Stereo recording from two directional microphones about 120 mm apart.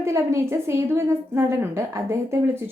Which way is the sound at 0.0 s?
25° right (ahead or behind).